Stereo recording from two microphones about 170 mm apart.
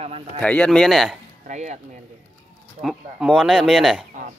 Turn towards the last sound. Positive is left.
turn(degrees=-5)  # may be behind; listen again after turning